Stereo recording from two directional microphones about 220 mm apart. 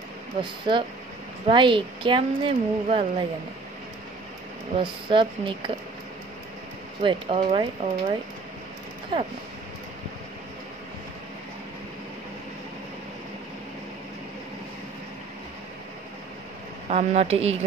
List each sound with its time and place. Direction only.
0.4 s speech: 20° right (ahead or behind)
4.7 s speech: 20° right (ahead or behind)
7.0 s speech: 25° right (ahead or behind)
16.9 s speech: 30° right (ahead or behind)